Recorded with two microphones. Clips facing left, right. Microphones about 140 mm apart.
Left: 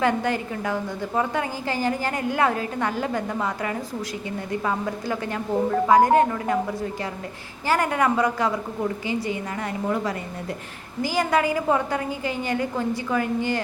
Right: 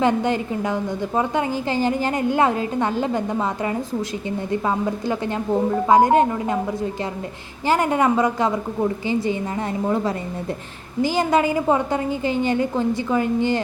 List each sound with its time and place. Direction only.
0.0 s a woman's voice: 20° right (ahead or behind)
7.7 s a woman's voice: 20° right (ahead or behind)